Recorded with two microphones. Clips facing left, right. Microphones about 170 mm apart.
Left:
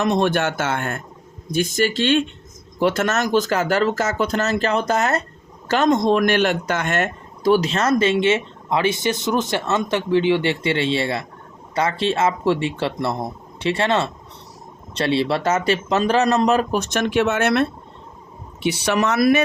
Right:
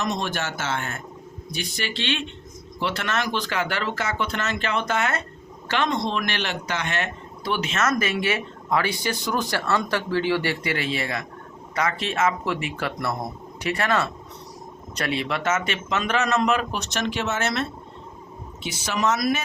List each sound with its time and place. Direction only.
0.0 s a man's voice: 55° left (ahead or behind)